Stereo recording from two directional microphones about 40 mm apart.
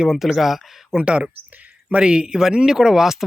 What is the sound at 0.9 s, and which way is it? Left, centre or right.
Speech, right.